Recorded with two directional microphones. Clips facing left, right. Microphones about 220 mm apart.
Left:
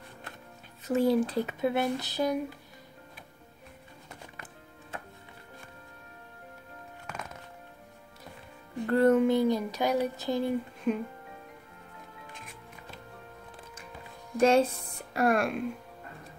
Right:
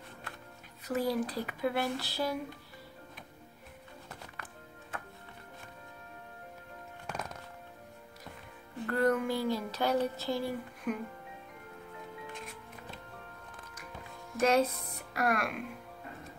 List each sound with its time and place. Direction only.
0.8 s speech: 25° left (ahead or behind)
8.8 s speech: 25° left (ahead or behind)
14.4 s speech: 30° left (ahead or behind)